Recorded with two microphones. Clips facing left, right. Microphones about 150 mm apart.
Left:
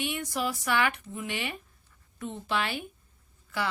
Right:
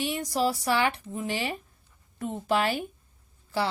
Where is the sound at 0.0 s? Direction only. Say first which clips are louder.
Right 4 dB; 35° right (ahead or behind).